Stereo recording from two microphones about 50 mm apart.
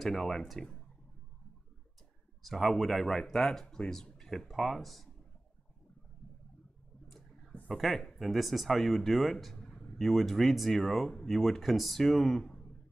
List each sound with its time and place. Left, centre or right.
0.0 s speech: centre
2.4 s speech: centre
3.6 s speech: centre
3.9 s speech: centre
7.1 s clicking: centre
7.6 s speech: centre
9.6 s a sound: centre
9.9 s speech: centre